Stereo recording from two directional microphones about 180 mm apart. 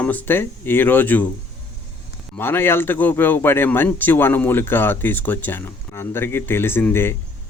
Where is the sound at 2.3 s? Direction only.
10° left (ahead or behind).